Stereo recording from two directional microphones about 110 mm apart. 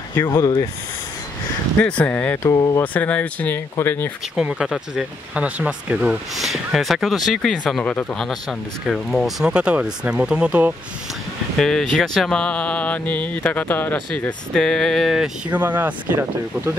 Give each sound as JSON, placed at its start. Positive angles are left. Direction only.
{"t": 1.8, "sound": "speech", "side_deg": 10}
{"t": 2.4, "sound": "speech", "side_deg": 30}
{"t": 2.8, "sound": "speech", "side_deg": 15}
{"t": 4.4, "sound": "speech", "side_deg": -10}
{"t": 11.5, "sound": "speech", "side_deg": 5}
{"t": 15.5, "sound": "speech", "side_deg": -15}